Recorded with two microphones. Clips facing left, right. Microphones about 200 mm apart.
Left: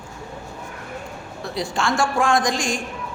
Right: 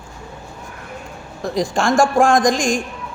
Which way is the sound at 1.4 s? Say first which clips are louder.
Right 6 dB; 45° right (ahead or behind).